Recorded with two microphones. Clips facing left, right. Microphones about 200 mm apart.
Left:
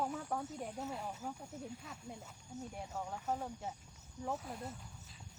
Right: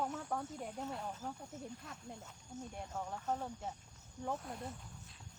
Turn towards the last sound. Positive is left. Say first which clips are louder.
# even
turn(degrees=0)  # may be behind; listen again after turning